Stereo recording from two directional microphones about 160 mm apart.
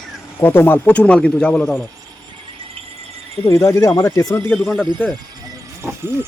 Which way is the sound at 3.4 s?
20° left (ahead or behind).